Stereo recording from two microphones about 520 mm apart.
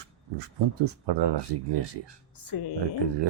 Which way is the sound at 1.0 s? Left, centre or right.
Right.